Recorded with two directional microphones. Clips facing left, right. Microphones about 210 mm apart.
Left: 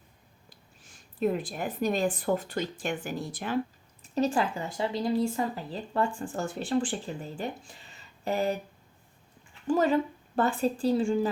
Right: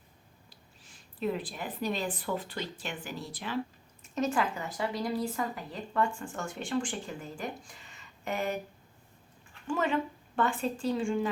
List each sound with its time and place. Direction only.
1.2 s speech: 45° left (ahead or behind)
4.1 s speech: 30° left (ahead or behind)
9.6 s speech: 35° left (ahead or behind)